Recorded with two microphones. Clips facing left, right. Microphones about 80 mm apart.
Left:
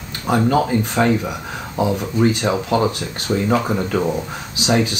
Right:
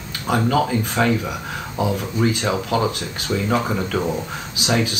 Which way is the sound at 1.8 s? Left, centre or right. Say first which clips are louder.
Left 3 dB; left.